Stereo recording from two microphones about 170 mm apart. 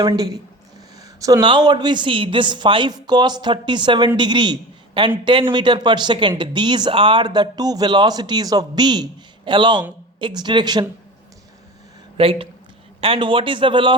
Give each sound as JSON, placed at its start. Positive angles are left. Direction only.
{"t": 0.0, "sound": "speech", "side_deg": -25}
{"t": 12.1, "sound": "speech", "side_deg": -35}